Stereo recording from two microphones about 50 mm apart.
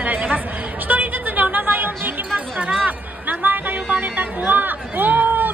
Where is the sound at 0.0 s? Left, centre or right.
Right.